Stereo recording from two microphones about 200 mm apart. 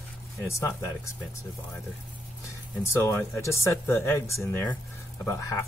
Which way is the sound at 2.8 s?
15° left (ahead or behind).